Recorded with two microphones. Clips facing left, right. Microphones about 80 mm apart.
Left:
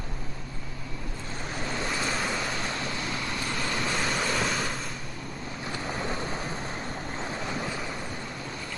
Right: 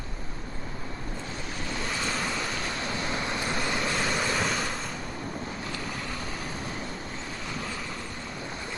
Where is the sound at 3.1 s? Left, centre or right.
Right.